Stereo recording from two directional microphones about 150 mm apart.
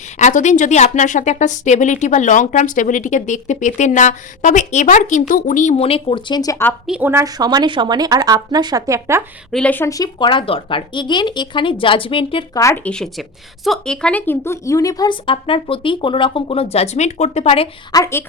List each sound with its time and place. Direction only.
0.2 s a woman's voice: 55° left (ahead or behind); by 6.7 s 20° left (ahead or behind)
6.8 s a woman's voice: 5° right (ahead or behind)
7.1 s speech: 20° right (ahead or behind)
9.5 s speech: 5° left (ahead or behind); by 12.5 s 35° left (ahead or behind)
12.5 s speech: 15° left (ahead or behind); by 17.7 s 45° left (ahead or behind)
17.9 s speech: 20° left (ahead or behind)